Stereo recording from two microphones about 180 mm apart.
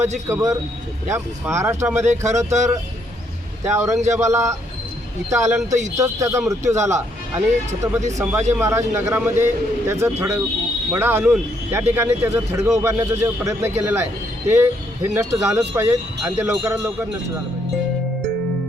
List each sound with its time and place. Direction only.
0.3 s speech: 15° right (ahead or behind)
3.7 s speech: 15° right (ahead or behind)
15.1 s speech: 15° right (ahead or behind)